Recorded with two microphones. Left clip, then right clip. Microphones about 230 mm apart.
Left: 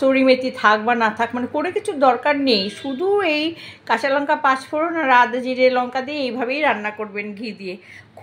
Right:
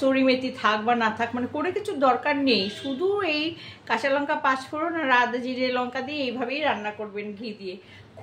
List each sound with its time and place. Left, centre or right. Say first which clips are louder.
0.0 s a woman's voice: left 6 dB; left